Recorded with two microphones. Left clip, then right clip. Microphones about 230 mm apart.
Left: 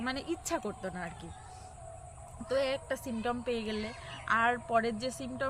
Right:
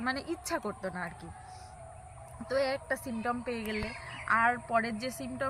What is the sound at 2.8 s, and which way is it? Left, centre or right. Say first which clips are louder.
A woman's voice: right 1 dB; centre.